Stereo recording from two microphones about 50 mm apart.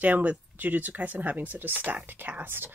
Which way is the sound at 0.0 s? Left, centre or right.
Right.